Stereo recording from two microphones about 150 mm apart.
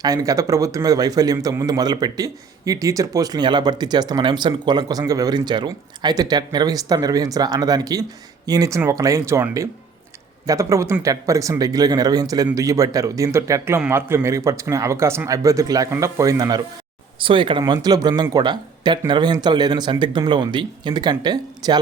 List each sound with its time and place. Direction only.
0.0 s a man's voice: 25° right (ahead or behind)
17.2 s a man's voice: 35° right (ahead or behind)